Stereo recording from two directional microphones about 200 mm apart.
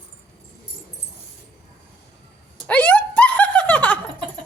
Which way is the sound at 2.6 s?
5° left (ahead or behind).